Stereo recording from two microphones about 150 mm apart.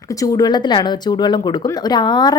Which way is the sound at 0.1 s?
25° left (ahead or behind).